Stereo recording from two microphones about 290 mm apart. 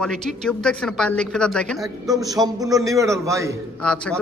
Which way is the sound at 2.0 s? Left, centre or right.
Centre.